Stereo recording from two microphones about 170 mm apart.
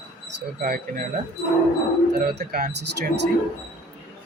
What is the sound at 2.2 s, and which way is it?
Speech, 65° right (ahead or behind).